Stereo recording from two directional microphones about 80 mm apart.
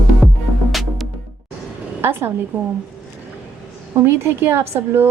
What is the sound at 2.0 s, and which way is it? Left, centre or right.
Speech, right.